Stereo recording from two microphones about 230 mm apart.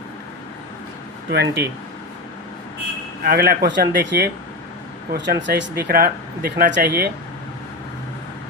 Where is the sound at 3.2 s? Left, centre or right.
Right.